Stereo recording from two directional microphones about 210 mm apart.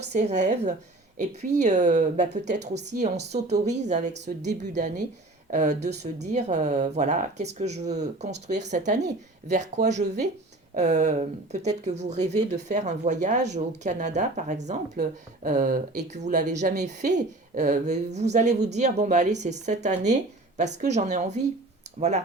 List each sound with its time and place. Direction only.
0.1 s speech: 35° right (ahead or behind)